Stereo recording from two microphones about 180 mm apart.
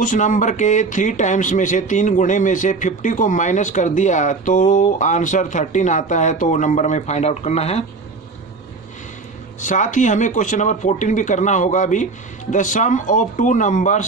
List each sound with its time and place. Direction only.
0.0 s speech: 45° left (ahead or behind)
9.6 s speech: 45° left (ahead or behind)